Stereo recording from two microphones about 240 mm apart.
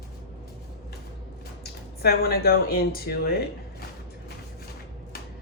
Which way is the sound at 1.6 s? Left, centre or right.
Left.